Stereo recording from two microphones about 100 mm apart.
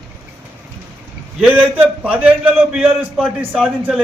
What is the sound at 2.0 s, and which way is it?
A man's voice, 10° right (ahead or behind).